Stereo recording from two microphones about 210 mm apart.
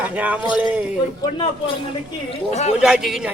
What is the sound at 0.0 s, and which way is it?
Speech, 5° right (ahead or behind).